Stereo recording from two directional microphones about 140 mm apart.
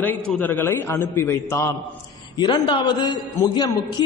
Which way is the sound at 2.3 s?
35° left (ahead or behind).